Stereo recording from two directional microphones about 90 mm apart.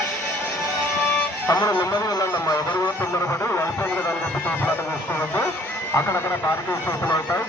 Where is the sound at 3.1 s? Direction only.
35° left (ahead or behind).